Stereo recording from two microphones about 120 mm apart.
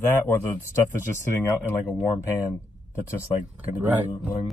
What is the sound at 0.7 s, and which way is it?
Speech, 20° left (ahead or behind).